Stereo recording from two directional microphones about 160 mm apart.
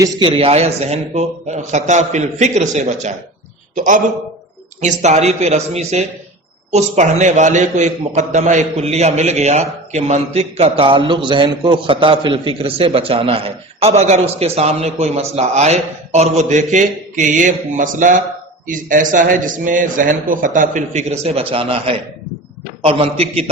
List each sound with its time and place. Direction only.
0.0 s a man's voice: 30° right (ahead or behind)